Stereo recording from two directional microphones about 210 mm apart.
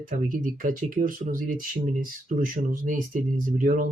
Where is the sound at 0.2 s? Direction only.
40° right (ahead or behind).